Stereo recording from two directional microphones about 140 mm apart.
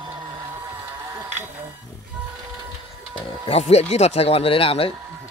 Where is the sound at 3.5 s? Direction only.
50° left (ahead or behind).